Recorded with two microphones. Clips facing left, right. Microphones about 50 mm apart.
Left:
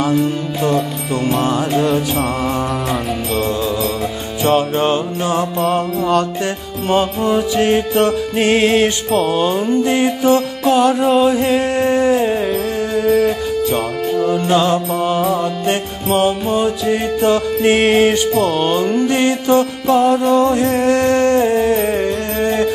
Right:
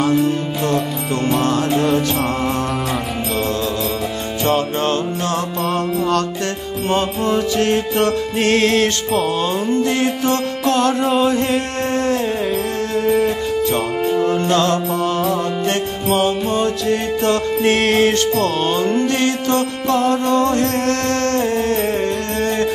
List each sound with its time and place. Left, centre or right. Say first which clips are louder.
0.1 s music: even; centre
4.5 s music: left 4 dB; centre
5.6 s music: left 2 dB; centre
14.5 s music: left 2 dB; centre